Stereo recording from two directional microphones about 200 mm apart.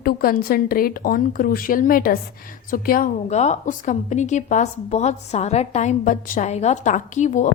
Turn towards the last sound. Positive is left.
turn(degrees=40)  # may be behind; listen again after turning